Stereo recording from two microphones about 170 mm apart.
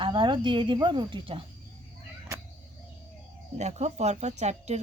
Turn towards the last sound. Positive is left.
turn(degrees=-40)  # may be behind; listen again after turning